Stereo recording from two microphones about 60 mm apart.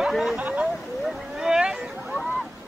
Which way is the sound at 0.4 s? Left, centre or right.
Right.